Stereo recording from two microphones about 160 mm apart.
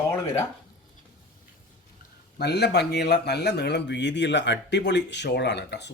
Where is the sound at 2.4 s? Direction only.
90° left.